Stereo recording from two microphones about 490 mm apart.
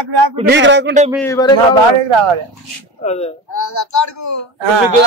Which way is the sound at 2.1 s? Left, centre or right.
Right.